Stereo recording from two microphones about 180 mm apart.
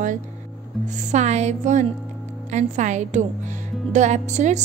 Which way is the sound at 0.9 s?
40° right (ahead or behind).